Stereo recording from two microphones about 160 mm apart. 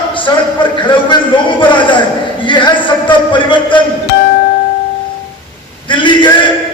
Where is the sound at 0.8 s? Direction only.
30° left (ahead or behind).